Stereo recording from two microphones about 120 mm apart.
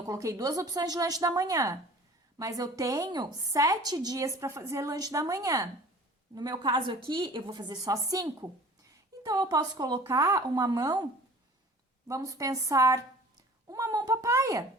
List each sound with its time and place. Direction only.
0.1 s a woman's voice: 25° right (ahead or behind)